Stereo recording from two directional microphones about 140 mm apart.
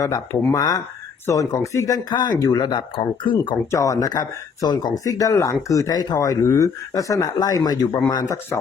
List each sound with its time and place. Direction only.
0.0 s speech: 25° left (ahead or behind)
3.7 s speech: 25° left (ahead or behind)